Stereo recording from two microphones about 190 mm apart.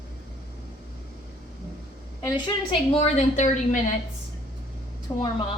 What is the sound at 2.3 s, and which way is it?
Speech, 25° left (ahead or behind).